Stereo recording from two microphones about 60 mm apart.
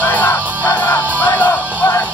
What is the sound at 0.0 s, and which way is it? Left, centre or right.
Music, left.